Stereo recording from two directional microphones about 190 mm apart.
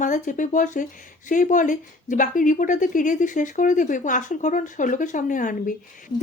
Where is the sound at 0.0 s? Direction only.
40° left (ahead or behind).